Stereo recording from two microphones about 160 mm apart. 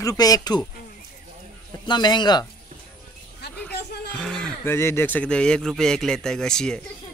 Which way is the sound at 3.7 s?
90° left.